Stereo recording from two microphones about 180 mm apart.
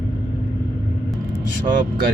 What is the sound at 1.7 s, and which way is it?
Speech, 45° right (ahead or behind).